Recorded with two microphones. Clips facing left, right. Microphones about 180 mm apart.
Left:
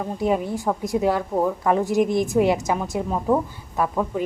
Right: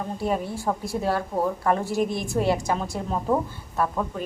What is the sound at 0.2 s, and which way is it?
A woman's voice, 15° left (ahead or behind).